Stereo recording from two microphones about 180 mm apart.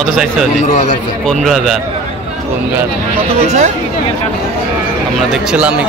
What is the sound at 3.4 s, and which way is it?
Speech, 40° right (ahead or behind).